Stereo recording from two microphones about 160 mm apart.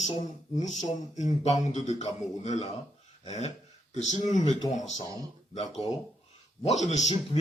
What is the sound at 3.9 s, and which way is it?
Speech, 45° left (ahead or behind).